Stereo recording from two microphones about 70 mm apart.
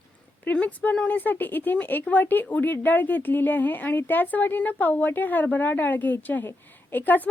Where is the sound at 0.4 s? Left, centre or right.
Left.